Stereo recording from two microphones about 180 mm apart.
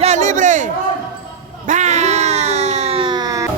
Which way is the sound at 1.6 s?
40° right (ahead or behind).